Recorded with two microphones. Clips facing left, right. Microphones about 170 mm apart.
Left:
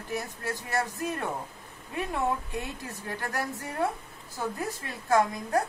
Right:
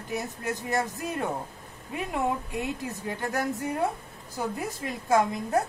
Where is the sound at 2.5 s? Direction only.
20° right (ahead or behind).